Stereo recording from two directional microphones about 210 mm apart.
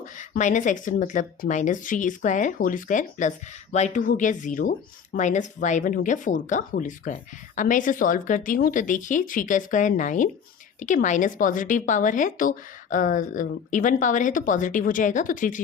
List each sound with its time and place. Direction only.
0.0 s speech: 35° left (ahead or behind)